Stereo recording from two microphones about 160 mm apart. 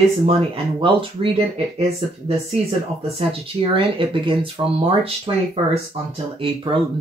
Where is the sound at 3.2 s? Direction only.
35° right (ahead or behind).